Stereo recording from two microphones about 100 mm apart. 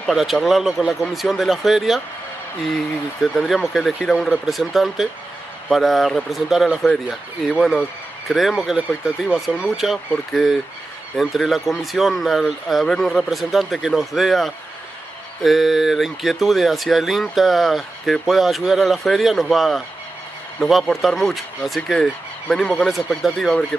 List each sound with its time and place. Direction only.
0.0 s speech: centre (ahead or behind)
3.2 s speech: centre (ahead or behind)